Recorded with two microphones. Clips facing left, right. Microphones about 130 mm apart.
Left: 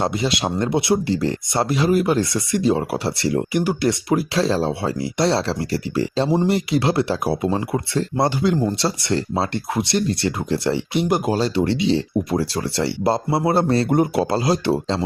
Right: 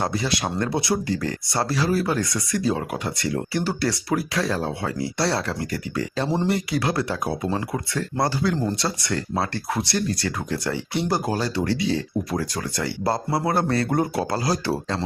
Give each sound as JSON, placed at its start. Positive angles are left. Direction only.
{"t": 0.0, "sound": "speech", "side_deg": 25}
{"t": 3.5, "sound": "speech", "side_deg": 15}